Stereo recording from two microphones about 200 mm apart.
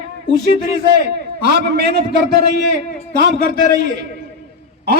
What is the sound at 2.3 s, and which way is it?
Speech, 55° right (ahead or behind).